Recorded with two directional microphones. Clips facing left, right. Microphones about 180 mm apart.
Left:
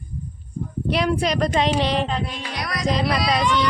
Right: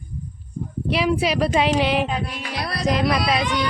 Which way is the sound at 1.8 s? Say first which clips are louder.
Right 1 dB; 5° right (ahead or behind).